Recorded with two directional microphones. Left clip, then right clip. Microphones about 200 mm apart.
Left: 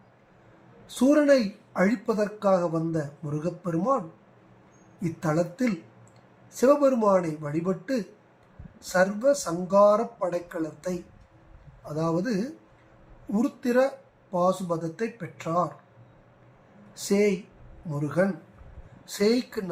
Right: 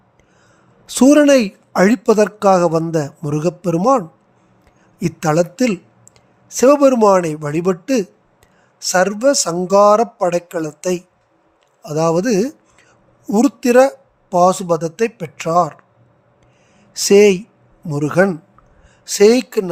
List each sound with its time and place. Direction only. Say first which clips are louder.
0.9 s a man's voice: right 10 dB; 55° right (ahead or behind)
16.9 s speech: right 15 dB; 55° right (ahead or behind)